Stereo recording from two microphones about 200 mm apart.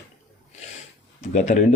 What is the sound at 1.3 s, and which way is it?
Speech, 35° left (ahead or behind).